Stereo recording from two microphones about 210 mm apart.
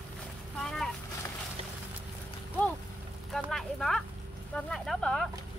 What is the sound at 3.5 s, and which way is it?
Clip-clop, centre (ahead or behind).